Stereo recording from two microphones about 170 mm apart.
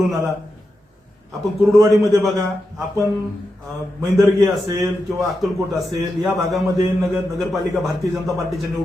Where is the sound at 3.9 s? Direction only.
20° right (ahead or behind).